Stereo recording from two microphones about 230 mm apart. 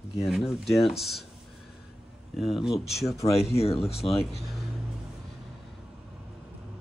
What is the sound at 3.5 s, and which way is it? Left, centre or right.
Speech, left.